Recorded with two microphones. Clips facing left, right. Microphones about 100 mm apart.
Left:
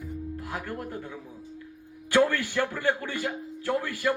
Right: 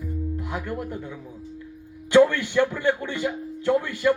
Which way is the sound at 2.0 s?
20° right (ahead or behind).